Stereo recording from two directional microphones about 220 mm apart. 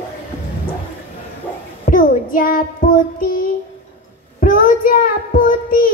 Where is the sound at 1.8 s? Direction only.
35° left (ahead or behind).